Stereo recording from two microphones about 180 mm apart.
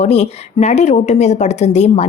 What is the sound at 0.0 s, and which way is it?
A woman's voice, 35° left (ahead or behind).